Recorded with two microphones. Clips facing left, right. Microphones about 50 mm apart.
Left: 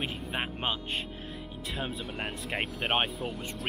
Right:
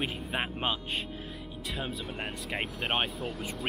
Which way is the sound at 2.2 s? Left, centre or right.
Centre.